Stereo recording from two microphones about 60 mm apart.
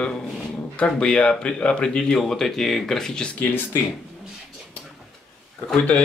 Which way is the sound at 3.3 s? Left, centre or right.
Left.